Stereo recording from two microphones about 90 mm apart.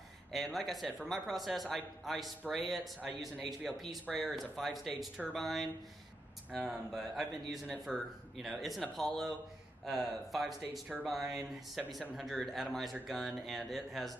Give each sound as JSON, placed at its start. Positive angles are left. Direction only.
{"t": 0.3, "sound": "speech", "side_deg": 0}
{"t": 3.0, "sound": "speech", "side_deg": -10}